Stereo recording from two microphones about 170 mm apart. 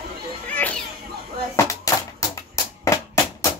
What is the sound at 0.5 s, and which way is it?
Music, 10° left (ahead or behind).